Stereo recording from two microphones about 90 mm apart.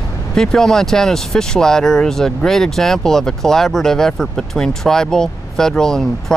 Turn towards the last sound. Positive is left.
turn(degrees=5)  # may be behind; listen again after turning